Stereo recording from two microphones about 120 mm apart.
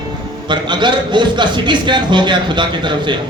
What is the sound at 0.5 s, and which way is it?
A man's voice, 40° right (ahead or behind).